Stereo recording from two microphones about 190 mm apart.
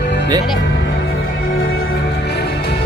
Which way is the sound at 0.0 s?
60° left (ahead or behind).